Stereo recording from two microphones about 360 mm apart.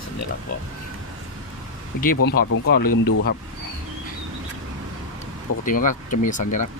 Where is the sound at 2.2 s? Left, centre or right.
Left.